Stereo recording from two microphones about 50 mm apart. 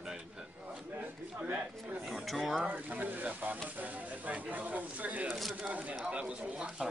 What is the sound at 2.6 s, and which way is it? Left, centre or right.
Speech, right.